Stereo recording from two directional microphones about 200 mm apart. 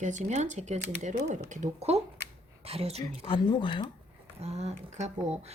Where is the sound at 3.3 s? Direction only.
25° left (ahead or behind).